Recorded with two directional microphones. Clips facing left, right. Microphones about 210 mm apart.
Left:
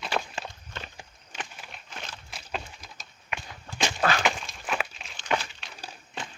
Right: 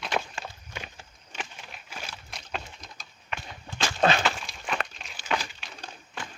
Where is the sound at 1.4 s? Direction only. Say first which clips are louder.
Right 1 dB; 10° right (ahead or behind).